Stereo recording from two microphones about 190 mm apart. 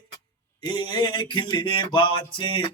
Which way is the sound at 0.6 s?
25° left (ahead or behind).